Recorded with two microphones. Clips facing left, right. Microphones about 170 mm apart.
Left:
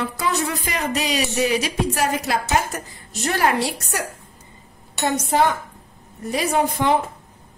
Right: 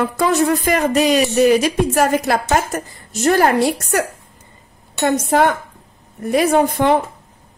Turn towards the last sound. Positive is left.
turn(degrees=-55)  # may be behind; listen again after turning